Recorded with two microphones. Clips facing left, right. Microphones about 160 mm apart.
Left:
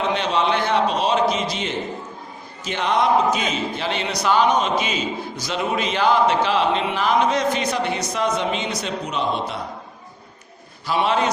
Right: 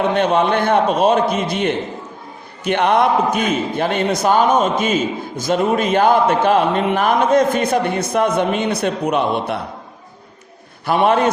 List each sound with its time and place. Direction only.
0.1 s a man's voice: 55° right (ahead or behind)
10.8 s a man's voice: 55° right (ahead or behind)